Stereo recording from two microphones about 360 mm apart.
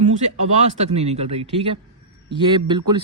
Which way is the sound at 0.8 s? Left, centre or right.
Centre.